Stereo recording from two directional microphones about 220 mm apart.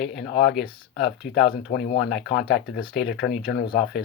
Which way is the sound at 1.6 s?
50° left (ahead or behind).